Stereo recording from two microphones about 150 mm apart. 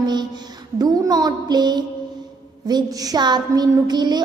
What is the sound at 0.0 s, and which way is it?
Music, 30° right (ahead or behind).